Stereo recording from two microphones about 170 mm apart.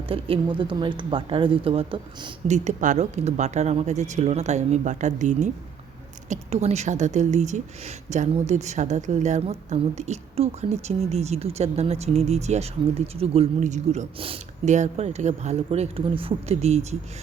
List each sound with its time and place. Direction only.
0.1 s speech: 30° right (ahead or behind)
2.5 s speech: 45° right (ahead or behind)